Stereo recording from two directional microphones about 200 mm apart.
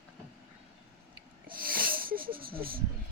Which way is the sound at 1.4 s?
45° right (ahead or behind).